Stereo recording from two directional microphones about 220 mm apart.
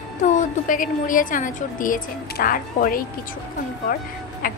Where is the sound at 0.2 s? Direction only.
35° left (ahead or behind).